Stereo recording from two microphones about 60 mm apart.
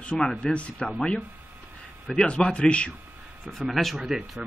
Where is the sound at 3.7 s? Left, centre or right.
Centre.